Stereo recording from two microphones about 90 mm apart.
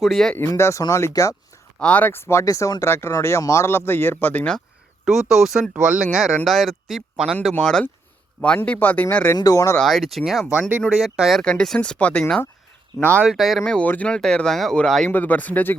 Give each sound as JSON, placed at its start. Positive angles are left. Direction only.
{"t": 0.0, "sound": "speech", "side_deg": 0}
{"t": 0.3, "sound": "speech", "side_deg": 30}
{"t": 1.8, "sound": "speech", "side_deg": 15}
{"t": 2.1, "sound": "speech", "side_deg": 30}
{"t": 5.0, "sound": "speech", "side_deg": -5}
{"t": 7.6, "sound": "speech", "side_deg": 5}
{"t": 9.4, "sound": "speech", "side_deg": 35}
{"t": 9.8, "sound": "speech", "side_deg": 0}
{"t": 10.5, "sound": "speech", "side_deg": -15}
{"t": 10.8, "sound": "speech", "side_deg": -5}
{"t": 13.2, "sound": "speech", "side_deg": 0}
{"t": 13.7, "sound": "speech", "side_deg": 15}
{"t": 14.2, "sound": "speech", "side_deg": 5}
{"t": 15.1, "sound": "speech", "side_deg": 20}